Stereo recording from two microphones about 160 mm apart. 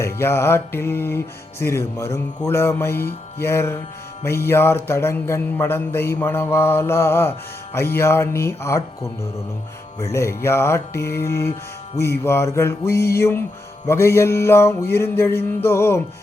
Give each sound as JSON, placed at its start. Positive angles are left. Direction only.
{"t": 0.0, "sound": "music", "side_deg": 15}
{"t": 10.0, "sound": "music", "side_deg": 20}